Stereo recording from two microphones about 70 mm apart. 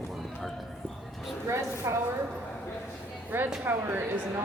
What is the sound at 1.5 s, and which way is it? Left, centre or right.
Speech, right.